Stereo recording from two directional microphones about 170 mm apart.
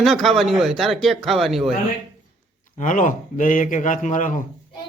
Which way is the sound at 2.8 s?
50° left (ahead or behind).